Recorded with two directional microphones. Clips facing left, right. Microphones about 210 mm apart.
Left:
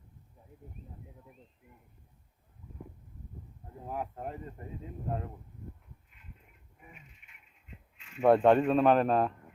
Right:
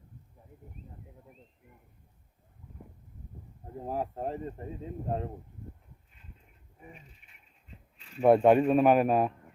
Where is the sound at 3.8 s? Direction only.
35° right (ahead or behind).